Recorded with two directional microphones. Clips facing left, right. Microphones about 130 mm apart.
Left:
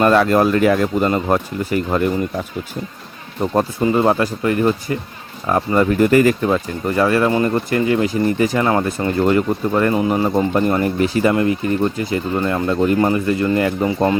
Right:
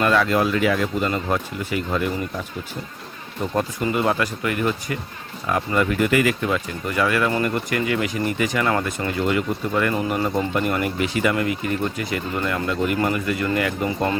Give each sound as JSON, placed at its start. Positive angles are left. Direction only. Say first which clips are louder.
{"t": 0.0, "sound": "speech", "louder": "left 6 dB", "side_deg": 40}
{"t": 3.4, "sound": "speech", "louder": "left 6 dB", "side_deg": 35}